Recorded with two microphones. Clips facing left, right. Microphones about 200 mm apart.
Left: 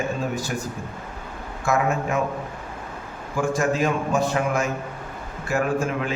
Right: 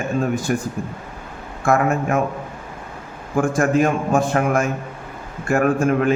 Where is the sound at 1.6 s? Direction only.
50° right (ahead or behind).